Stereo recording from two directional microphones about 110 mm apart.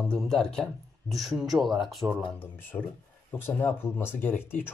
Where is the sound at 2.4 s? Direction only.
15° left (ahead or behind).